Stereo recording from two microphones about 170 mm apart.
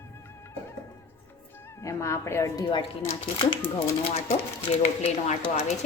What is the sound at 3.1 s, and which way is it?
Speech, 30° left (ahead or behind).